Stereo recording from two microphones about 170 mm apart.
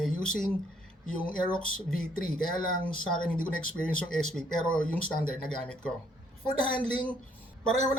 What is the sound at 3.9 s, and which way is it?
Speech, 5° left (ahead or behind).